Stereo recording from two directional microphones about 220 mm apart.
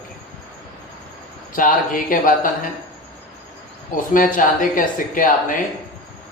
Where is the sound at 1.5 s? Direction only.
40° left (ahead or behind).